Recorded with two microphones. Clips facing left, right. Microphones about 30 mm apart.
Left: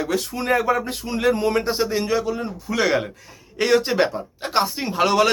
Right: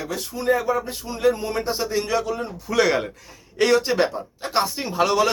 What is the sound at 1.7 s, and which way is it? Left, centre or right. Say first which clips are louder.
Speech: left 3 dB; left.